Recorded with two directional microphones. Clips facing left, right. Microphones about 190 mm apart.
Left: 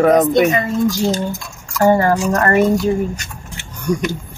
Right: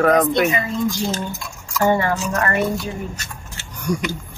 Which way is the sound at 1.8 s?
40° left (ahead or behind).